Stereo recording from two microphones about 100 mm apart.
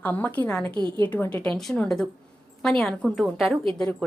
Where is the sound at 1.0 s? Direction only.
15° left (ahead or behind).